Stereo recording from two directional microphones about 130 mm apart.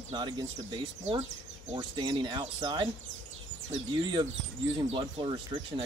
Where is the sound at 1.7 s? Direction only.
35° right (ahead or behind).